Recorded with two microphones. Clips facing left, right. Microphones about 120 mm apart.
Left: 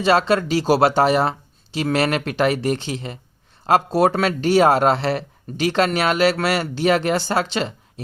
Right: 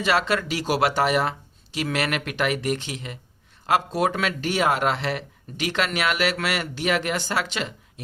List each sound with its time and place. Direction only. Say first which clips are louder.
0.0 s speech: left 6 dB; 30° left (ahead or behind)